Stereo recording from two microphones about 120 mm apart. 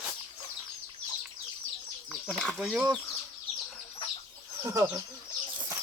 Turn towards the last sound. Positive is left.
turn(degrees=-25)  # may be behind; listen again after turning